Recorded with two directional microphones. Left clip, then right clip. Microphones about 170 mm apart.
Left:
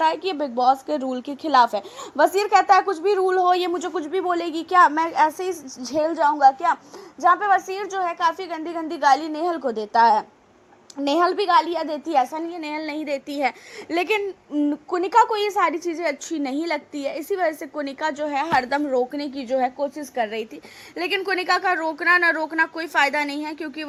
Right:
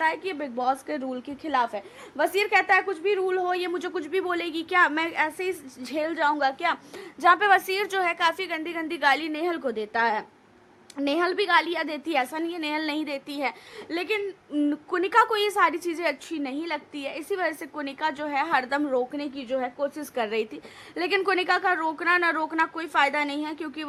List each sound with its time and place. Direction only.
0.0 s a woman's voice: 20° left (ahead or behind)
3.7 s a woman's voice: centre (ahead or behind)
4.4 s a woman's voice: 10° left (ahead or behind)
6.4 s a woman's voice: 30° right (ahead or behind)
7.9 s a woman's voice: 10° right (ahead or behind)
13.1 s a woman's voice: 10° left (ahead or behind)
13.9 s speech: 30° left (ahead or behind)
14.5 s a woman's voice: 10° left (ahead or behind)
16.3 s a woman's voice: 30° left (ahead or behind); by 19.7 s 15° left (ahead or behind)
20.0 s a woman's voice: 10° right (ahead or behind)